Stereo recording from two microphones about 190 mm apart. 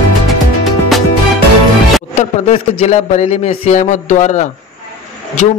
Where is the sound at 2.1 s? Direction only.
35° left (ahead or behind).